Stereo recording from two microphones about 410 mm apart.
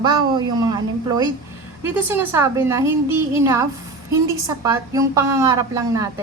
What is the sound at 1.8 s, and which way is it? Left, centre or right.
A woman's voice, centre.